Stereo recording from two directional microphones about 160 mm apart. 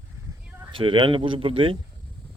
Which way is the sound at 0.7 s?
30° right (ahead or behind).